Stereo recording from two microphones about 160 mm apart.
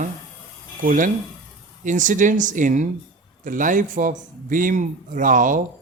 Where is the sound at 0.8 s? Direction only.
55° right (ahead or behind).